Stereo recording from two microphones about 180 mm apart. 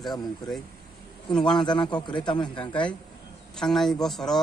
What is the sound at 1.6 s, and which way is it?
A man's voice, 25° left (ahead or behind).